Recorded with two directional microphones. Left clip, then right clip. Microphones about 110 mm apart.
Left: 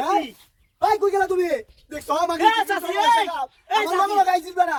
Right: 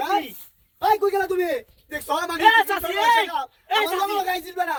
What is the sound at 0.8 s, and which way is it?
A man's voice, 30° left (ahead or behind).